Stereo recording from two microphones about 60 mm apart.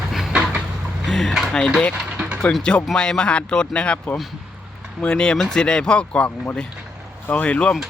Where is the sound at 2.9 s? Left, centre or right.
Centre.